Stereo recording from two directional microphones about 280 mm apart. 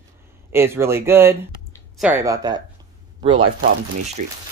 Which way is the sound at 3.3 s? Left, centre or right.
Right.